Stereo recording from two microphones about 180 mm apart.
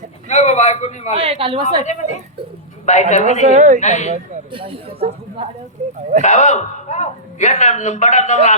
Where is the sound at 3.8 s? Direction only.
40° left (ahead or behind).